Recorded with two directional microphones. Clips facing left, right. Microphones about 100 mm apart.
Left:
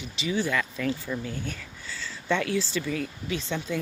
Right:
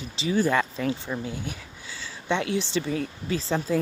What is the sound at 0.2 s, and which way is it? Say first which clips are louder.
Speech: right 4 dB; 40° right (ahead or behind).